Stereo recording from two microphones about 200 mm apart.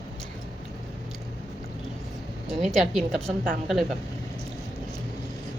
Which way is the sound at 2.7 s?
Centre (ahead or behind).